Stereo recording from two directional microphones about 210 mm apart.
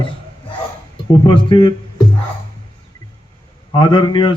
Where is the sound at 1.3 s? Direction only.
20° left (ahead or behind).